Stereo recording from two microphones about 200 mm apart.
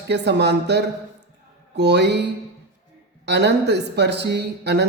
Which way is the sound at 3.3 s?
55° right (ahead or behind).